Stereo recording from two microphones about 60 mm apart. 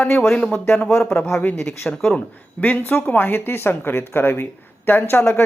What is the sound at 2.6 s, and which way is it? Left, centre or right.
Speech, left.